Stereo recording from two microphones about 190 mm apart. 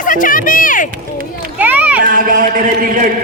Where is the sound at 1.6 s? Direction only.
10° right (ahead or behind).